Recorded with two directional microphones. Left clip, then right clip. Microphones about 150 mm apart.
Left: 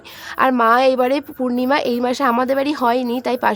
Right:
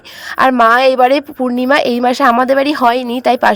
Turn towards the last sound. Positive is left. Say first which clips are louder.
# right 7 dB
turn(degrees=-35)  # may be behind; listen again after turning